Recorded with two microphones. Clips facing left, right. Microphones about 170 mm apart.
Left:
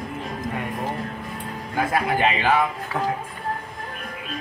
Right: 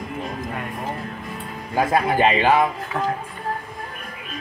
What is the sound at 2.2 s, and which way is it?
Speech, 35° right (ahead or behind).